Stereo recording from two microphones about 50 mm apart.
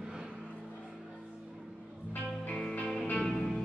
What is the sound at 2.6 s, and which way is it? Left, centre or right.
Music, left.